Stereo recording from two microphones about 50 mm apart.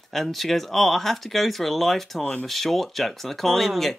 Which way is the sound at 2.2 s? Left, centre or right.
Left.